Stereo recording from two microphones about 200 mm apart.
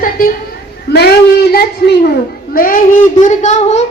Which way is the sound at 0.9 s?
50° left (ahead or behind).